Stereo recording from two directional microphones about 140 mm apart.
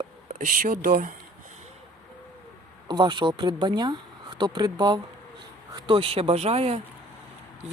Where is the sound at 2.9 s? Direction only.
35° right (ahead or behind).